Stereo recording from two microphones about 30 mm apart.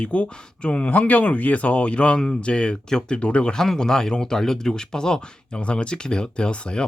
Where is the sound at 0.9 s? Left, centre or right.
Left.